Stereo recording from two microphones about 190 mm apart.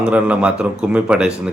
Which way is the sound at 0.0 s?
5° right (ahead or behind).